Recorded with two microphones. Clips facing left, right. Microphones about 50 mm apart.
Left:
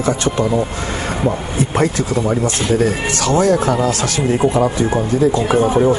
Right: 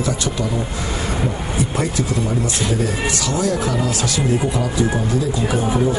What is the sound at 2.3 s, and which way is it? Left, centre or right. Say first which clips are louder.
Speech: left 4 dB; left.